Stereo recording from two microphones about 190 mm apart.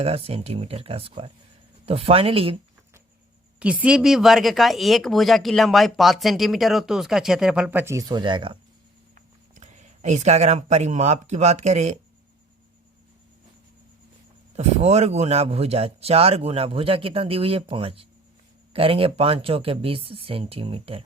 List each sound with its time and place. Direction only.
0.0 s a man's voice: 30° right (ahead or behind)
3.6 s speech: 5° right (ahead or behind); by 8.5 s 25° right (ahead or behind)
9.1 s speech: 40° right (ahead or behind)
14.5 s a man's voice: 35° right (ahead or behind)